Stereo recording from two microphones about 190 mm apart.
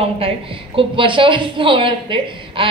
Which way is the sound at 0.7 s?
25° right (ahead or behind).